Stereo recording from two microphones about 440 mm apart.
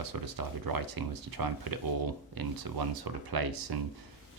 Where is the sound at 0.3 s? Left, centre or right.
Right.